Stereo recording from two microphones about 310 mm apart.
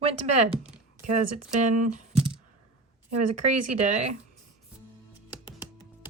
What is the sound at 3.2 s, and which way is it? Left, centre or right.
Speech, right.